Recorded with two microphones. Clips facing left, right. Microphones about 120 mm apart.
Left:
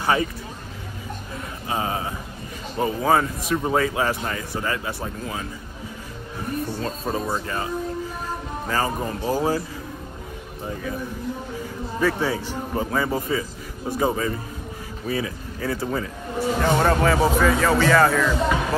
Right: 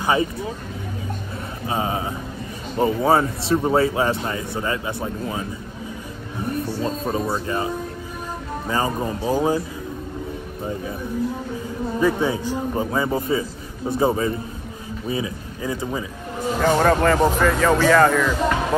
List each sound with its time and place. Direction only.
0.0 s speech: 20° right (ahead or behind)
1.7 s speech: 25° right (ahead or behind)
7.1 s speech: 10° right (ahead or behind)
7.4 s speech: 20° right (ahead or behind)
12.0 s speech: 20° right (ahead or behind)
16.3 s speech: centre (ahead or behind)